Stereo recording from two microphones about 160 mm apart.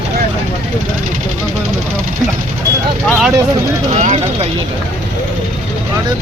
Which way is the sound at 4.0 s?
45° right (ahead or behind).